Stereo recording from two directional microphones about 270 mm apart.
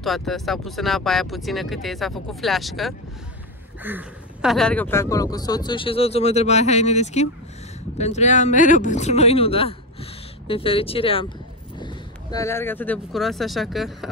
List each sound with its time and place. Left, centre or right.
0.0 s speech: centre